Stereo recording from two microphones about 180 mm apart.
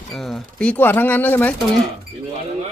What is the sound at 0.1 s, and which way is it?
Speech, centre (ahead or behind).